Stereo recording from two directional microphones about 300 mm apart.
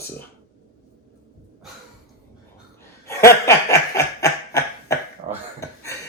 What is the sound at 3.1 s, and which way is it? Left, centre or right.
Snicker, centre.